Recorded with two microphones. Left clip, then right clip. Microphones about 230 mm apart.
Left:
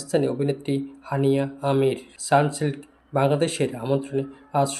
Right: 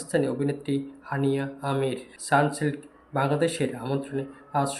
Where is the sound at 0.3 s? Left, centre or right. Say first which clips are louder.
Left 3 dB; left.